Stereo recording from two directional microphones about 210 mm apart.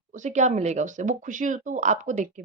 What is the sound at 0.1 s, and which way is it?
A woman's voice, 35° right (ahead or behind).